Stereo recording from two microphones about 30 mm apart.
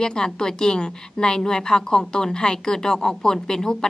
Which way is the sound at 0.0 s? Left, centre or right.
Left.